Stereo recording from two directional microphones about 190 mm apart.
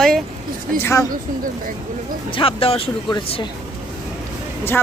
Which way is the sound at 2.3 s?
30° left (ahead or behind).